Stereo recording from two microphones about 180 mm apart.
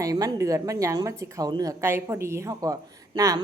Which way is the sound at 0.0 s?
20° right (ahead or behind).